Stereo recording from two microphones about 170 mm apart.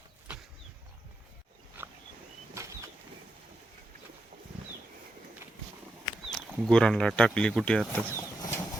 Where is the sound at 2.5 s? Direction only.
20° right (ahead or behind).